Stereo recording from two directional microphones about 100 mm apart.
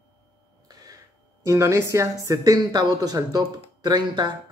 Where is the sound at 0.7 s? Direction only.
40° right (ahead or behind).